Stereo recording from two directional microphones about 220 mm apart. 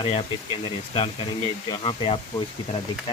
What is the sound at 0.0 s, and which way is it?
Speech, 25° left (ahead or behind).